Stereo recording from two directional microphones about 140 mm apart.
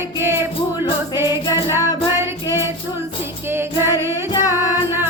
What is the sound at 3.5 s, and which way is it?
Music, 15° right (ahead or behind).